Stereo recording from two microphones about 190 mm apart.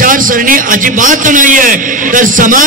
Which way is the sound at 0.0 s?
45° right (ahead or behind).